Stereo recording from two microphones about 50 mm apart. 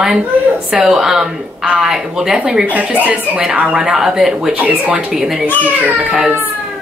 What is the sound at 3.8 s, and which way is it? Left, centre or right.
A woman's voice, centre.